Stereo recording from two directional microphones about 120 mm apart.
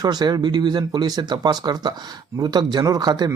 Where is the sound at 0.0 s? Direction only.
35° right (ahead or behind).